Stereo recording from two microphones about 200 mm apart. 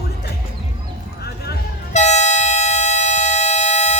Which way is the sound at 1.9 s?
35° left (ahead or behind).